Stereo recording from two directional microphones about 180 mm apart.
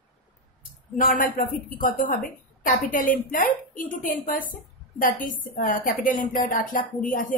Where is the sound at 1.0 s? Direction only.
50° left (ahead or behind).